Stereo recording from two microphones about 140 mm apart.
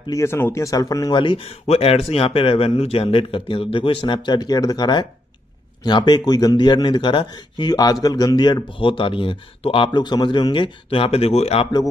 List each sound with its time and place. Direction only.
0.1 s speech: 20° left (ahead or behind); by 11.7 s 45° left (ahead or behind)